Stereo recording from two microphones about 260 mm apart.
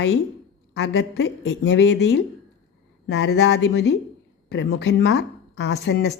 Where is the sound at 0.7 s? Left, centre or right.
Left.